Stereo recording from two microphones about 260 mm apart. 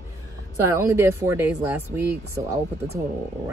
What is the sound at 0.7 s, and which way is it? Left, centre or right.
Speech, centre.